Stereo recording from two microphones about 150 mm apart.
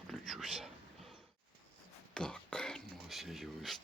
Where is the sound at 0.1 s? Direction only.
Centre (ahead or behind).